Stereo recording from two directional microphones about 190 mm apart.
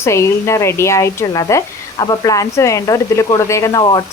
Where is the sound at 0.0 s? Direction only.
15° left (ahead or behind).